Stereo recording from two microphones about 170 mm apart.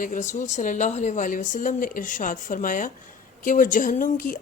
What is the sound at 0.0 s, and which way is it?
Speech, 50° left (ahead or behind).